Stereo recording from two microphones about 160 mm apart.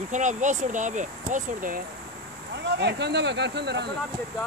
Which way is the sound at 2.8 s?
90° right.